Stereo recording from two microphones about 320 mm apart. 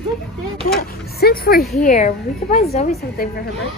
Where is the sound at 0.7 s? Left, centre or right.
Left.